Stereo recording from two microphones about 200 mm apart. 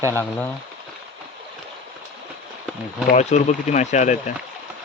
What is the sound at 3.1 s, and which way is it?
Speech, 35° left (ahead or behind).